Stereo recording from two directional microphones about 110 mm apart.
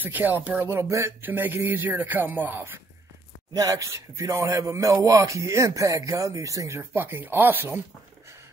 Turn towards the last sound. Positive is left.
turn(degrees=-20)  # may be behind; listen again after turning